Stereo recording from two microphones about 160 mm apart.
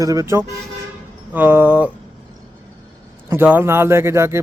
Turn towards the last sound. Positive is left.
turn(degrees=-15)  # may be behind; listen again after turning